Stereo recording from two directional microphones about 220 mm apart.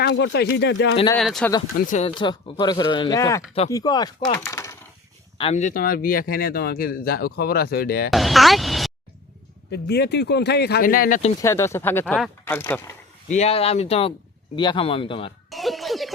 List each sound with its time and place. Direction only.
0.0 s speech: 50° left (ahead or behind)
1.1 s speech: 5° left (ahead or behind)
1.9 s speech: 30° left (ahead or behind)
5.4 s speech: 30° left (ahead or behind); by 8.1 s 45° left (ahead or behind)
8.1 s speech: centre (ahead or behind)
9.7 s speech: 50° left (ahead or behind)
11.4 s speech: 10° left (ahead or behind)
13.3 s speech: 30° left (ahead or behind)
15.4 s a sound: centre (ahead or behind)